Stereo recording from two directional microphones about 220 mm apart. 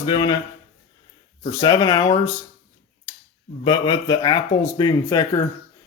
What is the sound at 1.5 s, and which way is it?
Speech, 15° left (ahead or behind).